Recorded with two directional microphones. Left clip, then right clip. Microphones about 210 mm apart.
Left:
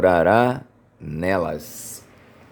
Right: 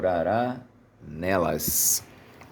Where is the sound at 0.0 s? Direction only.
35° left (ahead or behind).